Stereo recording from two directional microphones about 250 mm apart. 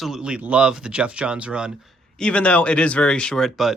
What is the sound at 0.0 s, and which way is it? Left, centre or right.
Speech, centre.